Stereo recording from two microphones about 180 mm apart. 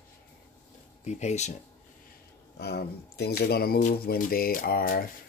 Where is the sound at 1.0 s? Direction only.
40° left (ahead or behind).